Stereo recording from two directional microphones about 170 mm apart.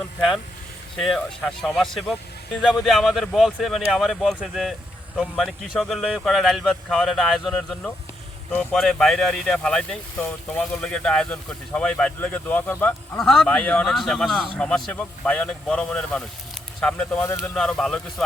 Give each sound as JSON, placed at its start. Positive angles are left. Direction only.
{"t": 0.9, "sound": "speech", "side_deg": 0}